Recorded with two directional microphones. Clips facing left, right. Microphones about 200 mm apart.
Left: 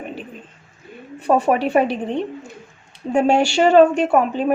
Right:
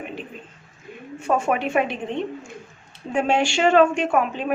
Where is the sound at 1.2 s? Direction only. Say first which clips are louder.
Left 5 dB; 35° left (ahead or behind).